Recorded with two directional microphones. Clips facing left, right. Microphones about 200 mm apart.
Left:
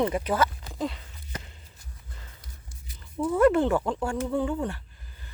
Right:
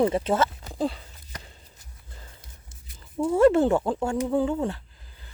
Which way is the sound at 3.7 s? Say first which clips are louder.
Right 3 dB; 25° right (ahead or behind).